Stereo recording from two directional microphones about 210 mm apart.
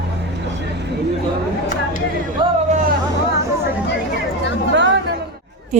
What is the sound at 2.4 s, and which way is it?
Vehicle, 25° right (ahead or behind).